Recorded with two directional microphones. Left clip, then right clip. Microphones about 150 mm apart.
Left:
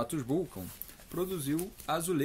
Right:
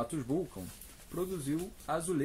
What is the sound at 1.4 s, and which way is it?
Speech, 15° left (ahead or behind).